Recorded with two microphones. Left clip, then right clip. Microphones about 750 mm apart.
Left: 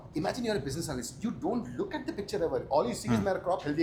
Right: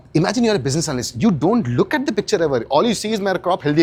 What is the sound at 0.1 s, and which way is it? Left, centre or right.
Speech, right.